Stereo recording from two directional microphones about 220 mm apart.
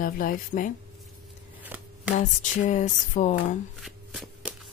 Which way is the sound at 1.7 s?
5° right (ahead or behind).